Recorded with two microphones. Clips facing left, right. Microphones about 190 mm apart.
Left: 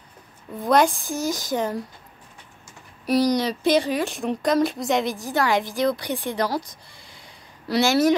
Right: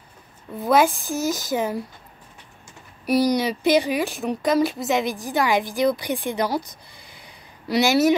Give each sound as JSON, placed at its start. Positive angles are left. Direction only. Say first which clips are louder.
{"t": 0.7, "sound": "a woman's voice", "louder": "right 1 dB", "side_deg": -5}
{"t": 3.1, "sound": "a woman's voice", "louder": "right 1 dB", "side_deg": -5}
{"t": 4.0, "sound": "speech", "louder": "even", "side_deg": 0}
{"t": 5.2, "sound": "a woman's voice", "louder": "right 1 dB", "side_deg": -15}
{"t": 7.6, "sound": "speech", "louder": "right 1 dB", "side_deg": -15}
{"t": 7.9, "sound": "speech", "louder": "right 1 dB", "side_deg": -5}